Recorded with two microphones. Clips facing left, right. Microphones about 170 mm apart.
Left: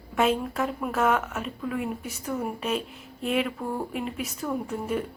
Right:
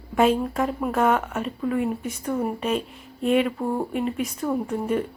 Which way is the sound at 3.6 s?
20° right (ahead or behind).